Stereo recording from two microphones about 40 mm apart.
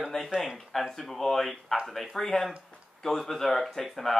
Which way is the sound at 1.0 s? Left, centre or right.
Centre.